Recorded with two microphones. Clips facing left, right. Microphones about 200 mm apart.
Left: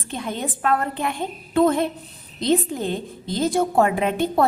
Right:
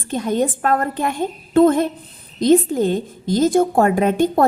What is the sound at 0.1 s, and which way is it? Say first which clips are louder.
A woman's voice: right 9 dB; 45° right (ahead or behind).